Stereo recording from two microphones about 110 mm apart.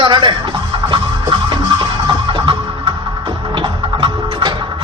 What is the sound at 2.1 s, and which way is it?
Music, 45° right (ahead or behind).